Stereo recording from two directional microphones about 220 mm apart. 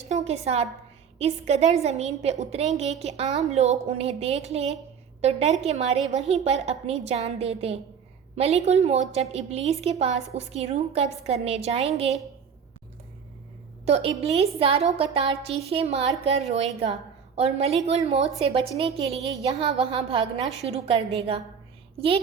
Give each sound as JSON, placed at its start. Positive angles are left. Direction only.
{"t": 0.1, "sound": "a woman's voice", "side_deg": -30}
{"t": 13.8, "sound": "a woman's voice", "side_deg": -25}